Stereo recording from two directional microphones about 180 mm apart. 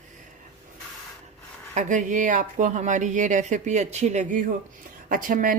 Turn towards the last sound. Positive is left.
turn(degrees=-50)  # may be behind; listen again after turning